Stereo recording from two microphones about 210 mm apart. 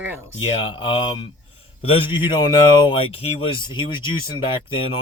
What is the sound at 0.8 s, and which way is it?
Speech, 25° left (ahead or behind).